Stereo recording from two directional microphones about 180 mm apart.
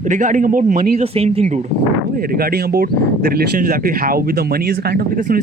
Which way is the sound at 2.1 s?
55° right (ahead or behind).